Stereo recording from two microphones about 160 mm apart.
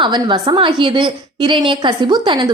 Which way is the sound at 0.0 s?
30° right (ahead or behind).